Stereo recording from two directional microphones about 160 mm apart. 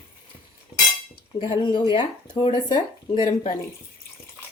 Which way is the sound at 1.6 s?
30° left (ahead or behind).